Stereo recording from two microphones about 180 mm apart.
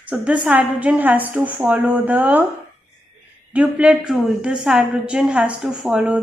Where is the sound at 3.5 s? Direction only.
5° right (ahead or behind).